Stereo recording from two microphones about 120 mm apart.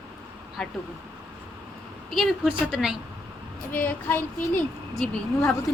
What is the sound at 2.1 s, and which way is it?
Speech, centre (ahead or behind).